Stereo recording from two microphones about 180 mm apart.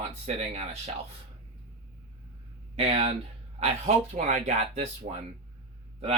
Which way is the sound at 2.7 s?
35° right (ahead or behind).